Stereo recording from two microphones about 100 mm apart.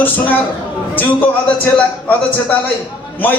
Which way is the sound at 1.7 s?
15° left (ahead or behind).